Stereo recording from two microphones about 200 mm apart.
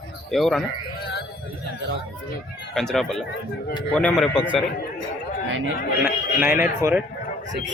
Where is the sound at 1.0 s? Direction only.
55° left (ahead or behind).